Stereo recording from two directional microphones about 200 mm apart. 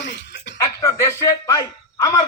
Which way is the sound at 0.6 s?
15° left (ahead or behind).